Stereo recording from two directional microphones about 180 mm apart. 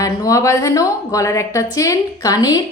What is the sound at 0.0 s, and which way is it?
Speech, 20° left (ahead or behind).